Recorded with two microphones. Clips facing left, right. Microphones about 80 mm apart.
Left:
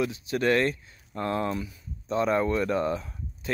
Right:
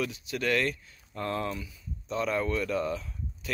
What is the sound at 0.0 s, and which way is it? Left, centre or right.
Speech, left.